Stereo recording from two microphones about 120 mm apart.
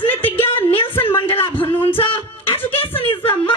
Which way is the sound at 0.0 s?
15° left (ahead or behind).